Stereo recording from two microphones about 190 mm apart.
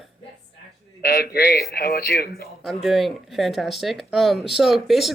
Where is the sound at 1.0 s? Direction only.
55° left (ahead or behind).